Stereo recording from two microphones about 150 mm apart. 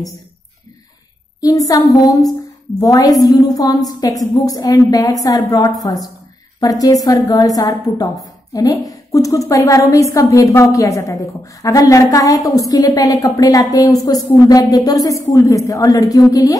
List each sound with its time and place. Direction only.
1.4 s a woman's voice: 25° left (ahead or behind)